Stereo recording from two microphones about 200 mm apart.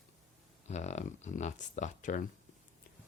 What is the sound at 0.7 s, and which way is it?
Speech, 35° left (ahead or behind).